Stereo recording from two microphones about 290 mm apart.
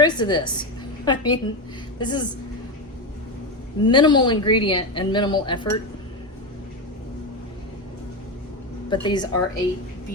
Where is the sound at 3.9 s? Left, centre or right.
Centre.